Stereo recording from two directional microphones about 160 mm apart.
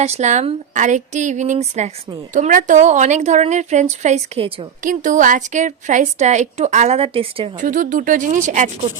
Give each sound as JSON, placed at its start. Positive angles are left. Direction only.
{"t": 0.0, "sound": "a woman's voice", "side_deg": -45}
{"t": 4.8, "sound": "a woman's voice", "side_deg": -55}
{"t": 7.6, "sound": "a woman's voice", "side_deg": -55}